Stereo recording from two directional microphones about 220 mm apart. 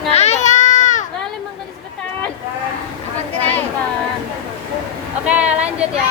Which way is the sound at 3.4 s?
10° left (ahead or behind).